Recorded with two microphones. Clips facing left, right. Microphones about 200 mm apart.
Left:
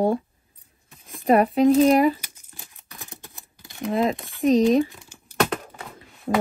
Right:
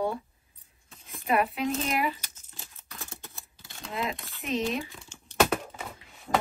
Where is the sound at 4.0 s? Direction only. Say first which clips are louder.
Left 9 dB; 50° left (ahead or behind).